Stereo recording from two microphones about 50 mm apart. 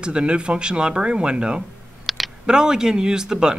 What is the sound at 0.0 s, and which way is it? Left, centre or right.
Speech, right.